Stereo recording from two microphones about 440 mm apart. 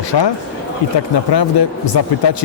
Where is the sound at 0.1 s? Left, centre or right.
Left.